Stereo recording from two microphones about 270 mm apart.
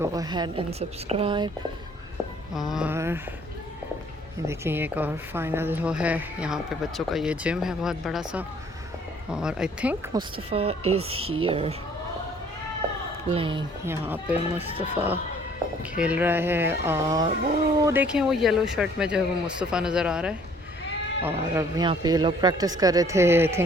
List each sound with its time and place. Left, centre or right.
0.0 s a man's voice: centre
2.6 s a woman's voice: centre
4.4 s a woman's voice: centre
10.2 s speech: right
13.3 s a man's voice: centre
14.7 s speech: right
16.0 s a man's voice: centre